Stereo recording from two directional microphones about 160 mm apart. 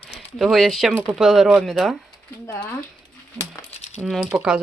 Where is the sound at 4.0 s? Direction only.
Centre (ahead or behind).